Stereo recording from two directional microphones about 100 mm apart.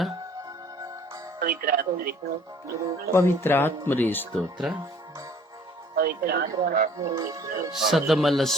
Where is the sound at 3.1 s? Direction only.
20° left (ahead or behind).